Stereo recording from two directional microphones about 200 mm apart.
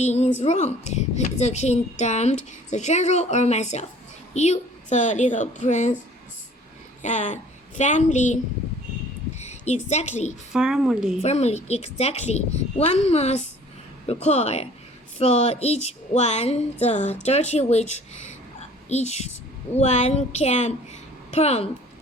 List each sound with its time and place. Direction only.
0.0 s a woman's voice: 35° left (ahead or behind)
7.0 s a woman's voice: 35° left (ahead or behind)
9.4 s a child's voice: 35° left (ahead or behind)
10.5 s speech: 5° right (ahead or behind)
11.2 s a woman's voice: 35° left (ahead or behind)